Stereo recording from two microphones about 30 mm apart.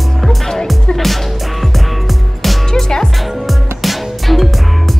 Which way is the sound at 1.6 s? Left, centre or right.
Centre.